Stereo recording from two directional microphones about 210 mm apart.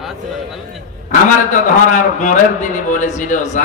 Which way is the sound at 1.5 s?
35° left (ahead or behind).